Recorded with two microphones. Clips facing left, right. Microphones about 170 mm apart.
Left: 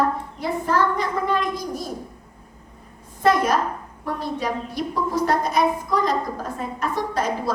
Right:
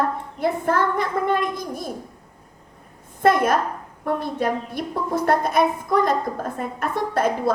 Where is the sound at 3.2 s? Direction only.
55° right (ahead or behind).